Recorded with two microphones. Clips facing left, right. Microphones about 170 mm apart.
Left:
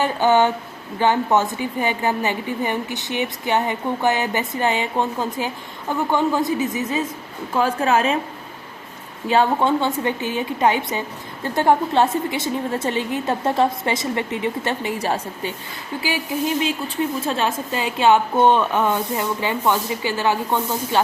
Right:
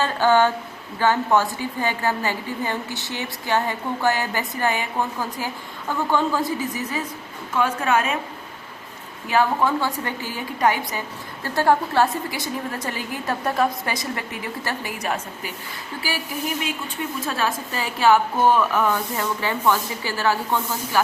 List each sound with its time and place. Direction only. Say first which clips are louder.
0.0 s a woman's voice: left 1 dB; 20° left (ahead or behind)
7.5 s a woman's voice: left 2 dB; 35° left (ahead or behind)
9.2 s a woman's voice: left 2 dB; 30° left (ahead or behind)